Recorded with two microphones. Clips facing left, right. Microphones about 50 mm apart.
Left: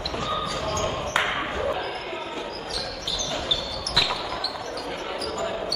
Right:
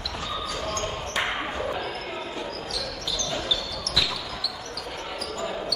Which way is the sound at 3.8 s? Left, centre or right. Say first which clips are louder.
Left 2 dB; left.